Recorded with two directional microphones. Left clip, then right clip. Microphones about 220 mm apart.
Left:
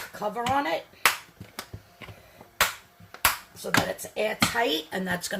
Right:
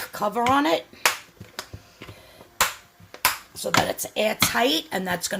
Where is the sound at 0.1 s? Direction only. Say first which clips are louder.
Right 6 dB; 50° right (ahead or behind).